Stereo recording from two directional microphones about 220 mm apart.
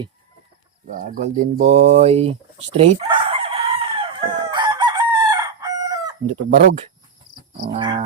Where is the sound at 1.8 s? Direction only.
30° right (ahead or behind).